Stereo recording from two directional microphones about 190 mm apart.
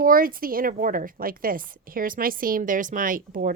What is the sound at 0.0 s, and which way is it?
A woman's voice, 50° right (ahead or behind).